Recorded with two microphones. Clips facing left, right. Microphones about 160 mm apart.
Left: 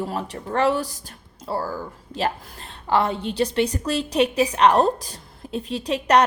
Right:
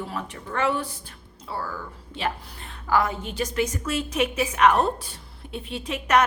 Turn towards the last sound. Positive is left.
turn(degrees=35)  # may be behind; listen again after turning